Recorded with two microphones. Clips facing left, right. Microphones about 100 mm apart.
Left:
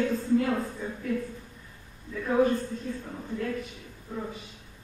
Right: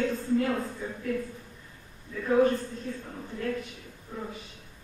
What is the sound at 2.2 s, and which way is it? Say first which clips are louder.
Speech: right 1 dB; 5° left (ahead or behind).